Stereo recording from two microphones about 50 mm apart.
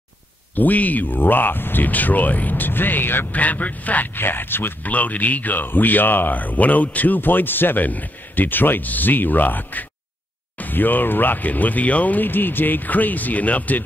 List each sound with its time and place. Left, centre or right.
0.6 s speech: left
4.8 s speech: left